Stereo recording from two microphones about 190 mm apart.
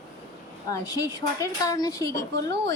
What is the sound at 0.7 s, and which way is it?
Speech, 20° left (ahead or behind).